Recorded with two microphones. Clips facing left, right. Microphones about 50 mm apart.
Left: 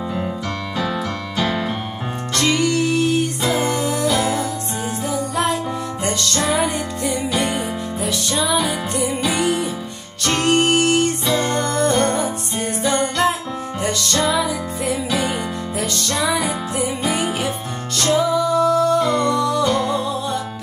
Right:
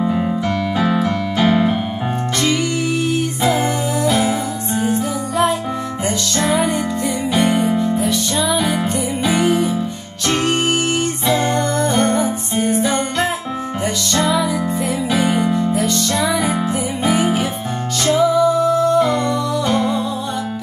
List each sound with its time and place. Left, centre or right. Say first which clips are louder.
0.7 s keyboard: right 4 dB; centre
2.3 s music: left 2 dB; centre